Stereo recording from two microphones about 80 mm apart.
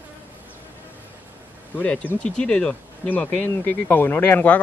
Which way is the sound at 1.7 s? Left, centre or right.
Centre.